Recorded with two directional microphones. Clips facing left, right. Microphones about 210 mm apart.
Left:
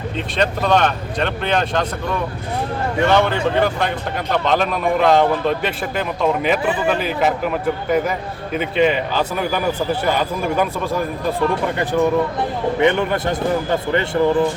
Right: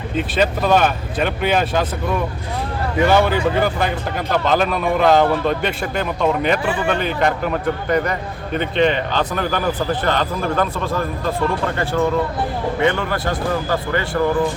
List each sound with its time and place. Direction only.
0.2 s a man's voice: 5° right (ahead or behind); by 14.2 s 20° left (ahead or behind)